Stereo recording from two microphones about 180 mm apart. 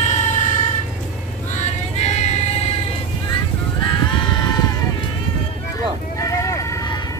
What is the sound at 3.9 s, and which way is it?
Music, 25° left (ahead or behind).